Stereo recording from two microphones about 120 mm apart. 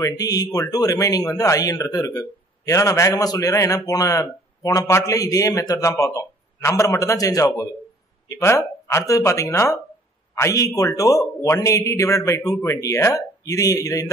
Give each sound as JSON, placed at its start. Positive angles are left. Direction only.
{"t": 0.0, "sound": "a man's voice", "side_deg": 30}